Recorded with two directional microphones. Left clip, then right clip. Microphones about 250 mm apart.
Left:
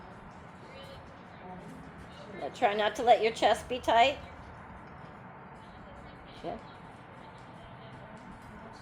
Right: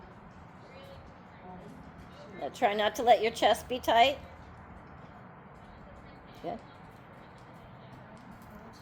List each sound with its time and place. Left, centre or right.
2.4 s a woman's voice: right